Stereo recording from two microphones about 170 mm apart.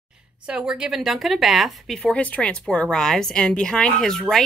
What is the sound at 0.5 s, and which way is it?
Speech, 5° right (ahead or behind).